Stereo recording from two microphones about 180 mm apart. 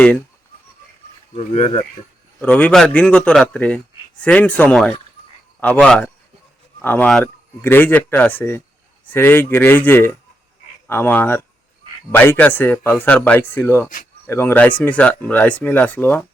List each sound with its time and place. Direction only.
1.3 s speech: 35° left (ahead or behind)
2.4 s speech: 5° left (ahead or behind)